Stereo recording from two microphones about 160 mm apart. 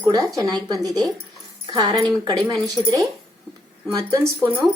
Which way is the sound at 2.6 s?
25° right (ahead or behind).